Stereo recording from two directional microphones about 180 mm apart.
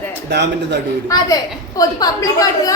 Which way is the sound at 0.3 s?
70° right (ahead or behind).